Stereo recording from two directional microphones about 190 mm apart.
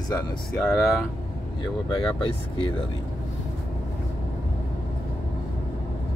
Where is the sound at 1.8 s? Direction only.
25° left (ahead or behind).